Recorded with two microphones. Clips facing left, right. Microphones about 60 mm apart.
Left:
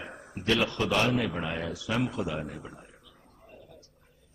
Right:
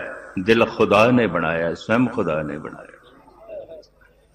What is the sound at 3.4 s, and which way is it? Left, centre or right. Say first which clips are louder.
Bird: right 17 dB; right.